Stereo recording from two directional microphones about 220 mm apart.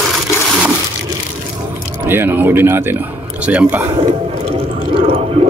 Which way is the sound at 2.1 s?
10° right (ahead or behind).